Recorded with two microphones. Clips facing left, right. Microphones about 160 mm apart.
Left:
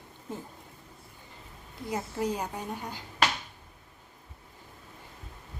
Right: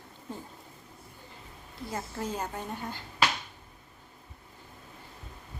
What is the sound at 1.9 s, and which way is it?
A woman's voice, 15° left (ahead or behind).